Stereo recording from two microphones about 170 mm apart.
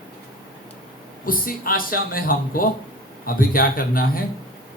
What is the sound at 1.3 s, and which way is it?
Speech, 55° left (ahead or behind).